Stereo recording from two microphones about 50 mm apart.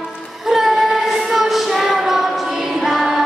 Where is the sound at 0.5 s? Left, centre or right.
Centre.